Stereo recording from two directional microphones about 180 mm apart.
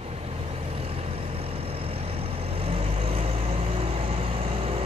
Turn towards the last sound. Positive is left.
turn(degrees=-30)  # may be behind; listen again after turning